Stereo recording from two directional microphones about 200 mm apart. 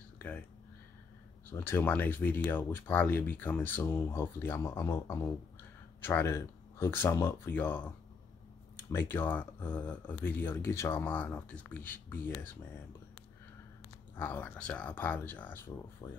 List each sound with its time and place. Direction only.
1.5 s speech: 10° left (ahead or behind)
8.9 s speech: 10° left (ahead or behind)
14.1 s speech: 10° left (ahead or behind)